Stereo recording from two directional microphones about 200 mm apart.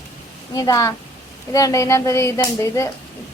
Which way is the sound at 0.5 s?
15° left (ahead or behind).